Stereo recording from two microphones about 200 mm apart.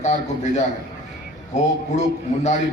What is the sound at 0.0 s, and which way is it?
Speech, 35° left (ahead or behind).